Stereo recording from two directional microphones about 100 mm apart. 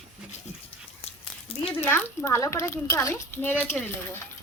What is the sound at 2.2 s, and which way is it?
A woman's voice, 30° left (ahead or behind).